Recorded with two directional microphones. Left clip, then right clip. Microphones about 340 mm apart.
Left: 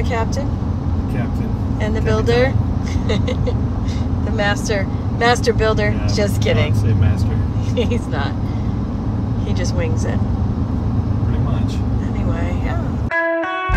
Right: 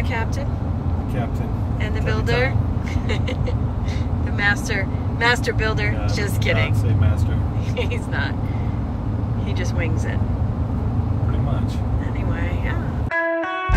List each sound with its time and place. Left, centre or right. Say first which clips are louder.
2.0 s speech: left 5 dB; centre
4.4 s speech: left 1 dB; centre
13.1 s music: left 3 dB; centre